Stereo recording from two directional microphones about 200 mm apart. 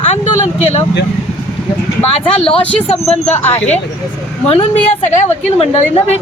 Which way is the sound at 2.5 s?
5° left (ahead or behind).